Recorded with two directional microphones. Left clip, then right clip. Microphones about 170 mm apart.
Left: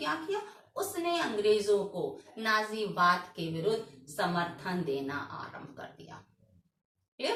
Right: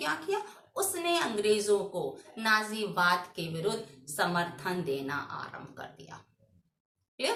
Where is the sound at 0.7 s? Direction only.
30° right (ahead or behind).